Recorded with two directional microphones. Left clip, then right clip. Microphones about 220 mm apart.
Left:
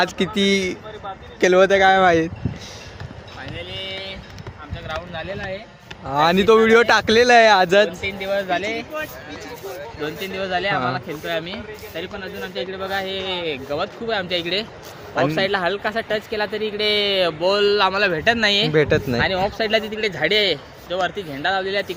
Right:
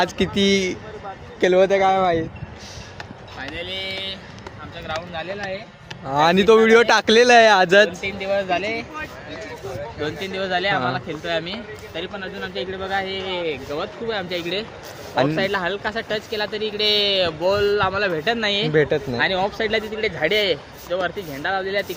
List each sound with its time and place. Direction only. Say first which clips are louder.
0.0 s speech: even; 5° left (ahead or behind)
1.4 s speech: left 2 dB; 10° left (ahead or behind); by 2.3 s 25° left (ahead or behind)
3.5 s a sound: right 2 dB; 40° right (ahead or behind)
5.1 s speech: right 1 dB; centre (ahead or behind)
10.0 s speech: even; 5° right (ahead or behind)
12.7 s speech: right 1 dB; 25° left (ahead or behind)
13.1 s a man's voice: even; 50° left (ahead or behind)
15.4 s speech: left 2 dB; 35° left (ahead or behind); by 18.7 s 55° left (ahead or behind)
18.7 s speech: left 1 dB; 10° left (ahead or behind)
18.9 s speech: left 1 dB; 25° left (ahead or behind)
19.6 s a man's voice: left 2 dB; 50° left (ahead or behind)